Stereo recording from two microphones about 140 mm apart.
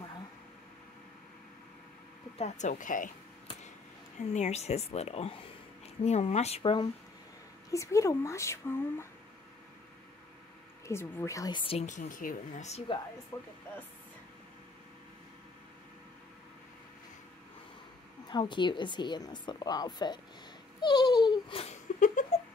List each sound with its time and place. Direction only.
2.3 s speech: 55° left (ahead or behind); by 3.1 s 70° left (ahead or behind)
4.2 s a woman's voice: 55° left (ahead or behind); by 6.9 s 40° left (ahead or behind)
7.7 s speech: 20° left (ahead or behind)
10.9 s speech: 20° left (ahead or behind)
11.8 s speech: 65° left (ahead or behind)
13.3 s speech: 25° left (ahead or behind)
18.3 s speech: 35° left (ahead or behind)
20.8 s a sound: 30° left (ahead or behind)
22.0 s a sound: 65° left (ahead or behind)